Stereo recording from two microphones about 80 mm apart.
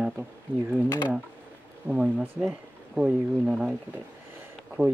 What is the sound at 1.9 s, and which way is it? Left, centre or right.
Speech, centre.